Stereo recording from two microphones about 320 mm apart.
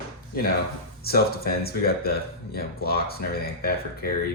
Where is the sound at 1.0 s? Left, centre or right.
Left.